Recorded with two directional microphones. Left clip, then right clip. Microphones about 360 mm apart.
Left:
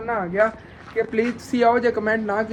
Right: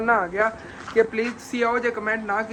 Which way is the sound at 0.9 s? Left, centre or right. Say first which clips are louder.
Right 1 dB; centre.